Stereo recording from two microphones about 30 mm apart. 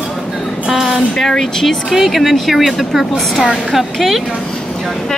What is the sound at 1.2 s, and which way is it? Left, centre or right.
Speech, centre.